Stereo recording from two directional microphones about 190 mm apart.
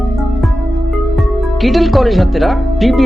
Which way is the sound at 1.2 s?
Centre (ahead or behind).